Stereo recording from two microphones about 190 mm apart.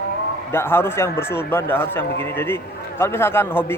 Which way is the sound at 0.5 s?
10° left (ahead or behind).